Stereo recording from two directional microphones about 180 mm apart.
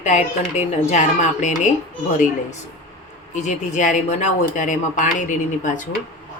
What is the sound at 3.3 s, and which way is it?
Speech, 40° left (ahead or behind).